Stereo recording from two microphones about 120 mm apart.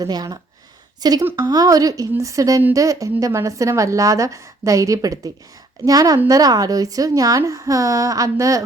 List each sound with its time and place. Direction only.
0.0 s a woman's voice: 35° right (ahead or behind)